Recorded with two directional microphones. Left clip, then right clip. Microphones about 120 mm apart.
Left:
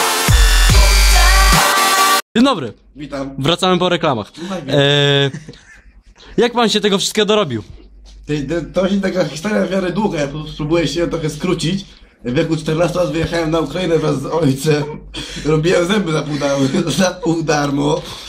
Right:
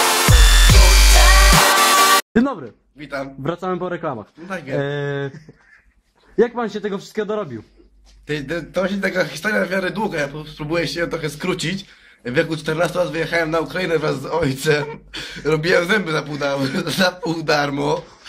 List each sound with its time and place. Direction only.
0.0 s music: centre (ahead or behind)
2.4 s a man's voice: 25° left (ahead or behind)
4.0 s a man's voice: 15° left (ahead or behind)
6.6 s a man's voice: 30° left (ahead or behind)
8.3 s a man's voice: 35° right (ahead or behind)